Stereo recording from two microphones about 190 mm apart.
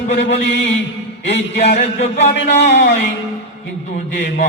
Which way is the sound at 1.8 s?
35° left (ahead or behind).